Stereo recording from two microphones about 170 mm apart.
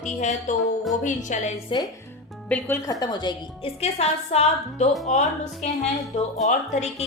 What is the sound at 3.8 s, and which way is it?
A woman's voice, 40° left (ahead or behind).